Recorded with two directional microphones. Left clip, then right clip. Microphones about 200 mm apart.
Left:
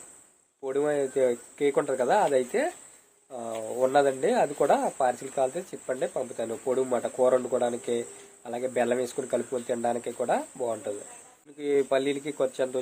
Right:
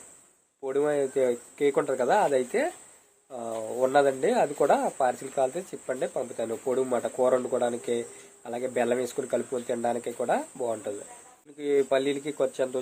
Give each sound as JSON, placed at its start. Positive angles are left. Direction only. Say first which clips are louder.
{"t": 0.6, "sound": "speech", "louder": "right 1 dB", "side_deg": 0}